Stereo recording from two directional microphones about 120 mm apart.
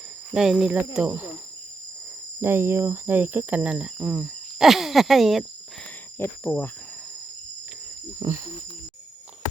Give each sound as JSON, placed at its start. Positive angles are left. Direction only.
{"t": 0.3, "sound": "speech", "side_deg": -5}
{"t": 0.9, "sound": "cricket", "side_deg": -10}
{"t": 2.4, "sound": "cricket", "side_deg": -20}
{"t": 6.1, "sound": "speech", "side_deg": 20}
{"t": 8.2, "sound": "speech", "side_deg": -30}